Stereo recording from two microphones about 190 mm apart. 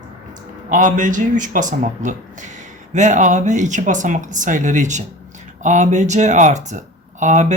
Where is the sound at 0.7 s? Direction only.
45° right (ahead or behind).